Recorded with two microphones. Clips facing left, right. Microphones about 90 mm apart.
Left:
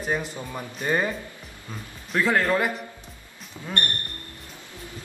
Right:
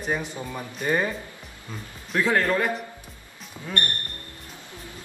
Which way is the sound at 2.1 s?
Centre (ahead or behind).